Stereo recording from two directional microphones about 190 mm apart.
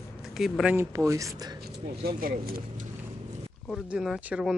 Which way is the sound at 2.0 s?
50° right (ahead or behind).